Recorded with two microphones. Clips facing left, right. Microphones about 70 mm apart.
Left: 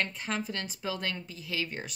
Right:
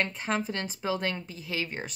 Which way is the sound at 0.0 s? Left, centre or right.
Right.